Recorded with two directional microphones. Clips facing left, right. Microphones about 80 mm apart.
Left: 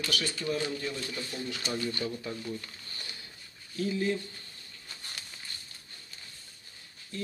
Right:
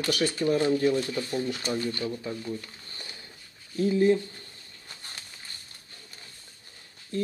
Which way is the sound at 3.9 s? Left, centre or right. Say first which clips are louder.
Right 9 dB; right.